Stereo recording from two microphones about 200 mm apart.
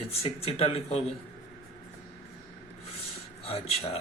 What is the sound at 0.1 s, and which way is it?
Speech, 30° left (ahead or behind).